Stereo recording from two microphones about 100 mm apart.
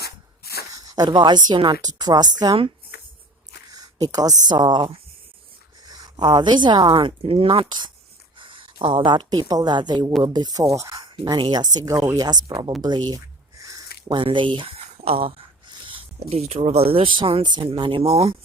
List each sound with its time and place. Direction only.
0.7 s a woman's voice: 35° right (ahead or behind)
3.7 s a woman's voice: 40° right (ahead or behind)
11.0 s speech: 50° right (ahead or behind)
12.5 s a woman's voice: 55° right (ahead or behind)
13.6 s a sound: 35° right (ahead or behind)
14.2 s speech: 55° right (ahead or behind); by 17.1 s 80° right
17.2 s speech: 60° right (ahead or behind)